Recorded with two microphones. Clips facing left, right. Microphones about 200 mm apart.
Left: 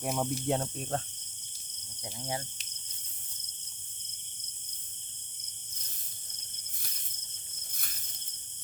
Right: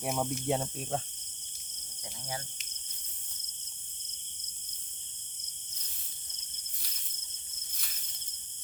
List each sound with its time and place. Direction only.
0.0 s speech: centre (ahead or behind)
2.0 s speech: 25° left (ahead or behind)
7.7 s cricket: 50° left (ahead or behind)